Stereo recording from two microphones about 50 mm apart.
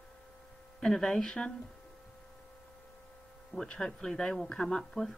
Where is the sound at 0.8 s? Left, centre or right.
Centre.